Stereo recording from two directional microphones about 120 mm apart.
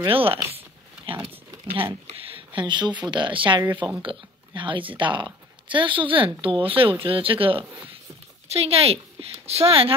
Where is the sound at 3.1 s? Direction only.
40° right (ahead or behind).